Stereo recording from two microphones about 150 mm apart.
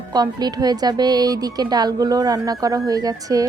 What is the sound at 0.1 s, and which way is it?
Speech, 25° right (ahead or behind).